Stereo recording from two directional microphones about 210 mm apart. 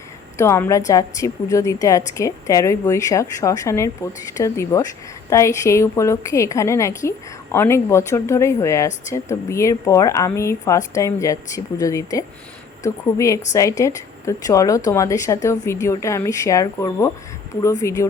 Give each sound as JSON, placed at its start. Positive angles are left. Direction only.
{"t": 0.3, "sound": "a woman's voice", "side_deg": 15}